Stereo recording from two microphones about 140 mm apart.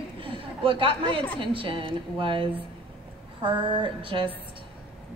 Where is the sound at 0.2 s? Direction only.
40° right (ahead or behind).